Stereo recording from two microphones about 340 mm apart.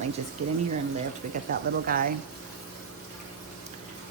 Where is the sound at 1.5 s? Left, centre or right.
Right.